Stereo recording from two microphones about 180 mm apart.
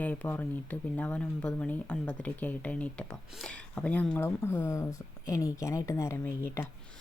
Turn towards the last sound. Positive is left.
turn(degrees=15)  # may be behind; listen again after turning